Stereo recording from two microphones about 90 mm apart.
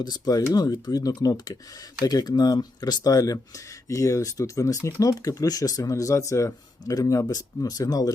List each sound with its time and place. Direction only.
0.0 s speech: 45° left (ahead or behind)